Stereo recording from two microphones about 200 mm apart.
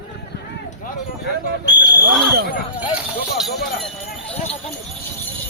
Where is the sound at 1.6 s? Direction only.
60° left (ahead or behind).